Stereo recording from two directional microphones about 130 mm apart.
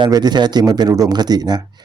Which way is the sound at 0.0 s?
35° right (ahead or behind).